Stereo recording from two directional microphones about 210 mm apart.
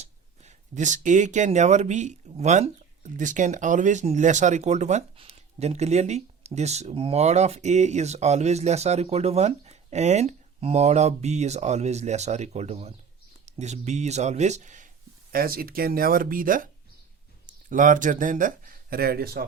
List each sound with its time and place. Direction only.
0.0 s speech: 35° right (ahead or behind)
17.7 s speech: 40° right (ahead or behind)